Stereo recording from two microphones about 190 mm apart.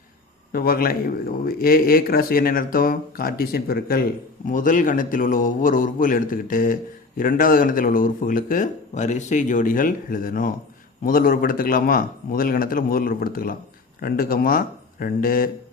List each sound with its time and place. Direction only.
0.5 s speech: 50° left (ahead or behind)